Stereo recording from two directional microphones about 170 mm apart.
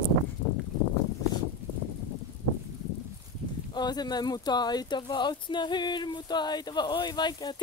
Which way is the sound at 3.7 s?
25° left (ahead or behind).